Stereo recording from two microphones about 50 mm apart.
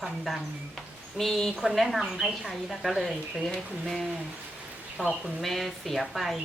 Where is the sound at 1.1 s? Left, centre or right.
Centre.